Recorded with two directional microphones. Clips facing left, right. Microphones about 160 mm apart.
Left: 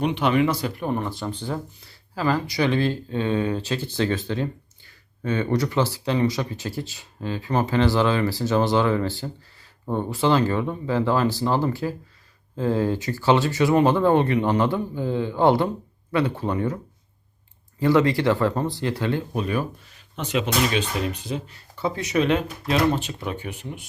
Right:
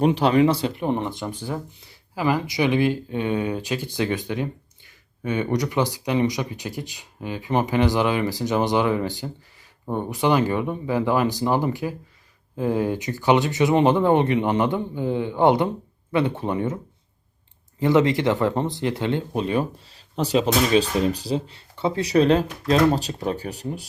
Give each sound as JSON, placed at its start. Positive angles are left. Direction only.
{"t": 0.0, "sound": "speech", "side_deg": -35}
{"t": 17.7, "sound": "speech", "side_deg": -20}